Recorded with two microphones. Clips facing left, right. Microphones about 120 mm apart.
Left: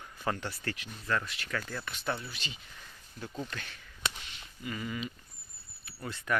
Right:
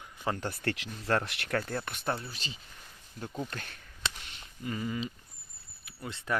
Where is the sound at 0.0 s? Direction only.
20° right (ahead or behind).